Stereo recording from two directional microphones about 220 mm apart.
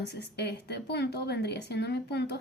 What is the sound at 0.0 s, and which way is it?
Speech, 50° left (ahead or behind).